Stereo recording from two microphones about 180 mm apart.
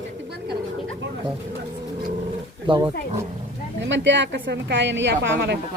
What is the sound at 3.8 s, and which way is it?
A woman's voice, 90° right.